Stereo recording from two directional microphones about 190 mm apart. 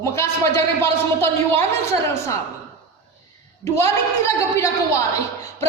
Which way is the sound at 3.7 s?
15° left (ahead or behind).